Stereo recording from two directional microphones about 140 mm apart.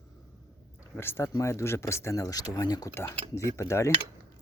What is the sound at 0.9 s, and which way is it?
Speech, 15° left (ahead or behind).